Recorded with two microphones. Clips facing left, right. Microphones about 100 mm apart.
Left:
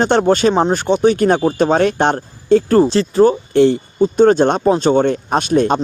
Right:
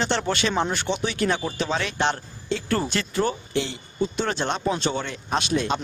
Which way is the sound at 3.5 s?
50° left (ahead or behind).